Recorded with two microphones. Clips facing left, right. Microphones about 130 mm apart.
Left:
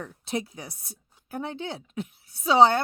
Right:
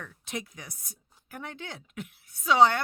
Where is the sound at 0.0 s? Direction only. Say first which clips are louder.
Left 6 dB; 30° left (ahead or behind).